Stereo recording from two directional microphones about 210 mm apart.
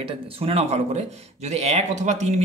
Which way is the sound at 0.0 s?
25° right (ahead or behind).